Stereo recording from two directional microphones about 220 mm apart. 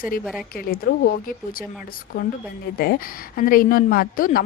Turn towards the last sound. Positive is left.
turn(degrees=40)  # may be behind; listen again after turning